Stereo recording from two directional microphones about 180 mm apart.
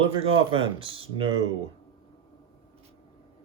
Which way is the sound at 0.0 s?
30° right (ahead or behind).